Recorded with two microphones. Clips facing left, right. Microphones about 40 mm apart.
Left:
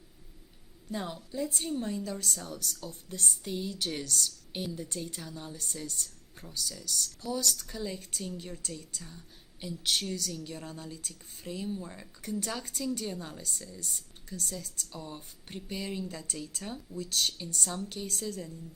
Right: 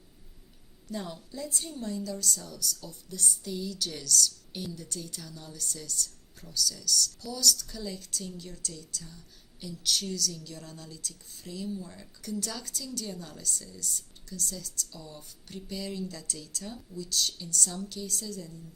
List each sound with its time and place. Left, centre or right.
0.9 s a woman's voice: left